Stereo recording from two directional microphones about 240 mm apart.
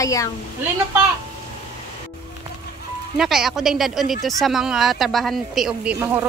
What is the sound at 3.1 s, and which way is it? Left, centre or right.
Speech, centre.